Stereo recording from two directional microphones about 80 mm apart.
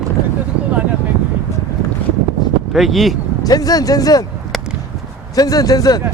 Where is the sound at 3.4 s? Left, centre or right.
Left.